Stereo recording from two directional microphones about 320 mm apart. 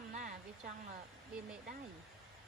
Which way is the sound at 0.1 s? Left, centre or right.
Right.